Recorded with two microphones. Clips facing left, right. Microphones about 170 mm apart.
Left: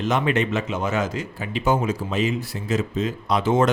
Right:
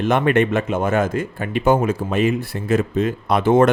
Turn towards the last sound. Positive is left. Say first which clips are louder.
# right 5 dB
turn(degrees=-55)  # may be behind; listen again after turning